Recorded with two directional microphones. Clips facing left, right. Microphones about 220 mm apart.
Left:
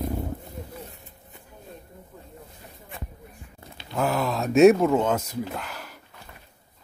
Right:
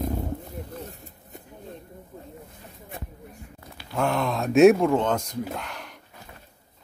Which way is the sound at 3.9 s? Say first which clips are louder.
Even; 5° left (ahead or behind).